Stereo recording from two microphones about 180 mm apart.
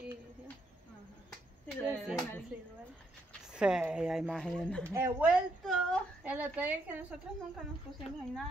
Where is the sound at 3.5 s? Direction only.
5° right (ahead or behind).